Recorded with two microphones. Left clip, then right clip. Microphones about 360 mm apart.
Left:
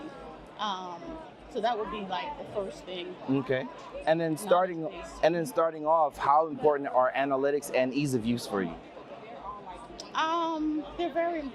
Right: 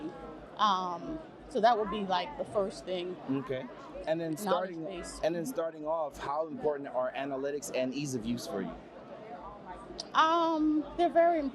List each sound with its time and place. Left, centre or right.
0.6 s a woman's voice: right
3.3 s speech: left
5.2 s speech: left
10.1 s speech: right